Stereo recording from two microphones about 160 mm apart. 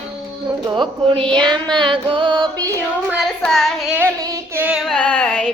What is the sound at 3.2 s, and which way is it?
Child singing, 5° left (ahead or behind).